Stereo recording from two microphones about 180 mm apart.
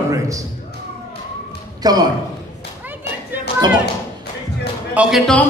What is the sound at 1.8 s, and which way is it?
Speech, 20° right (ahead or behind).